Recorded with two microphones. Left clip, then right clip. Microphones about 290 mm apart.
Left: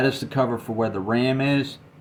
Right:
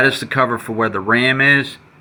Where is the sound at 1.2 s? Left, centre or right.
Centre.